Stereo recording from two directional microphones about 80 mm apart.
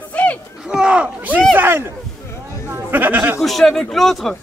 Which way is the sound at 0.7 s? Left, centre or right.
Centre.